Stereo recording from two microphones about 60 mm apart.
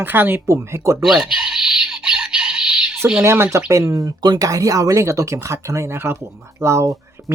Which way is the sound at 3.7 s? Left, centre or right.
Right.